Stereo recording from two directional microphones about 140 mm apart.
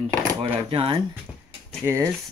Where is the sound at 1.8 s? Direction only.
20° right (ahead or behind).